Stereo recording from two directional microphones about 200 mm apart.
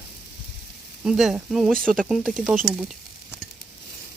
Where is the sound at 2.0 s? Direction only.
Centre (ahead or behind).